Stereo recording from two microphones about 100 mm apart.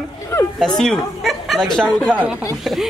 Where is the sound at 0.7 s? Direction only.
5° left (ahead or behind).